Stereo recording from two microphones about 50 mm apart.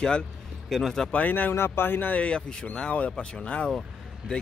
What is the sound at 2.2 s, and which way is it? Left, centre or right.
Speech, centre.